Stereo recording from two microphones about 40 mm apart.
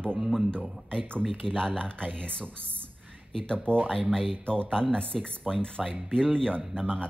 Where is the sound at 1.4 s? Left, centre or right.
Centre.